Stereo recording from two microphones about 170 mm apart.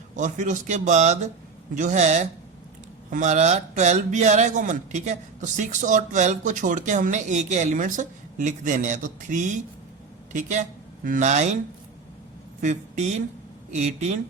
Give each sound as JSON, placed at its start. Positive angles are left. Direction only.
{"t": 0.2, "sound": "speech", "side_deg": -45}
{"t": 12.6, "sound": "speech", "side_deg": -40}